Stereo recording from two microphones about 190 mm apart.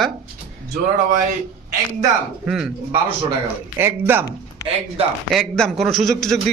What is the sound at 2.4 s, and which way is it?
Speech, centre (ahead or behind).